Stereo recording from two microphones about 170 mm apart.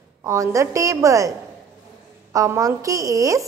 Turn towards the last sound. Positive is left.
turn(degrees=-20)  # may be behind; listen again after turning